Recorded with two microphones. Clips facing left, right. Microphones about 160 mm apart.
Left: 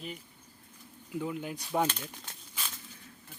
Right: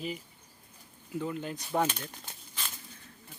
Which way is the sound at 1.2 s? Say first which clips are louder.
Even; 10° left (ahead or behind).